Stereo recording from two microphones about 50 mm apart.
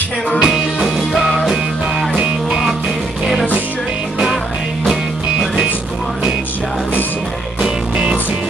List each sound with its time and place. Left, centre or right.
0.4 s music: centre
0.8 s music: centre